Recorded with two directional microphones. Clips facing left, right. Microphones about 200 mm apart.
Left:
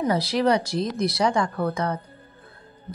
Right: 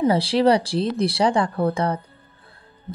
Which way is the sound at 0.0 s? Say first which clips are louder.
Right 4 dB; 30° right (ahead or behind).